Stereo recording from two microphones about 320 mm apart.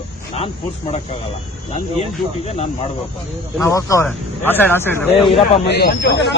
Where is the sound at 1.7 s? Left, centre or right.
Centre.